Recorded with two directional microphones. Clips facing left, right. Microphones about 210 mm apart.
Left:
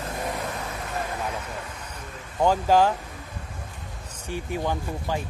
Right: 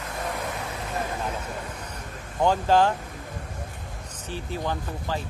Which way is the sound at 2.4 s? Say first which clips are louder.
Left 1 dB; 10° left (ahead or behind).